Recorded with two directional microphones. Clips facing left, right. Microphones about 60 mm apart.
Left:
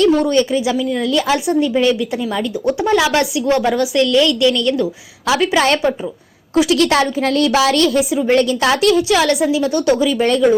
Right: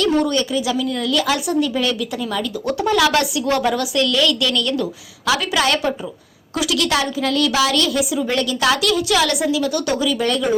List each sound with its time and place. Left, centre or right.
0.0 s a woman's voice: left